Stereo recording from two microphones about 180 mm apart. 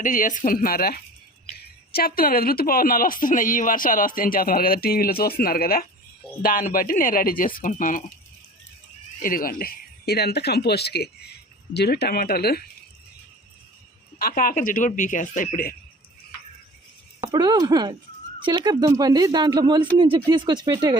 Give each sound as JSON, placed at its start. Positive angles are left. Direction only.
{"t": 0.0, "sound": "speech", "side_deg": 45}
{"t": 9.2, "sound": "speech", "side_deg": 55}
{"t": 14.2, "sound": "speech", "side_deg": 55}
{"t": 17.2, "sound": "speech", "side_deg": -20}